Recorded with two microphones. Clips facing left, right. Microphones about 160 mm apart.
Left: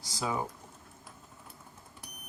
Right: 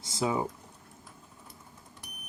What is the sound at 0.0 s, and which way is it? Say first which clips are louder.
Speech: right 4 dB; 25° right (ahead or behind).